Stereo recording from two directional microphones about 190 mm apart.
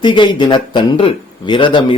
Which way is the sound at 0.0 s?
25° left (ahead or behind).